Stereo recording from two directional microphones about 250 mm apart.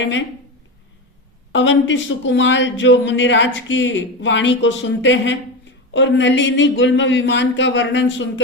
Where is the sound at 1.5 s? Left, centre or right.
Left.